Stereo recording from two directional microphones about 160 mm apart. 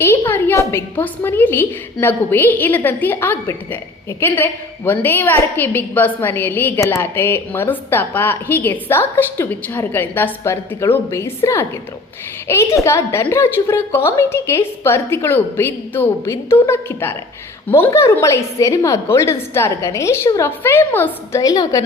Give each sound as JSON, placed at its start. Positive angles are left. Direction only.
{"t": 0.0, "sound": "a woman's voice", "side_deg": 15}
{"t": 12.5, "sound": "a woman's voice", "side_deg": 20}